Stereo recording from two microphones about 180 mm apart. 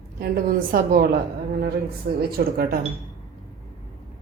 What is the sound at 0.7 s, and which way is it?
Speech, 55° right (ahead or behind).